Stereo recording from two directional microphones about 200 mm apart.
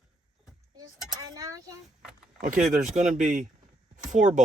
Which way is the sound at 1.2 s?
15° right (ahead or behind).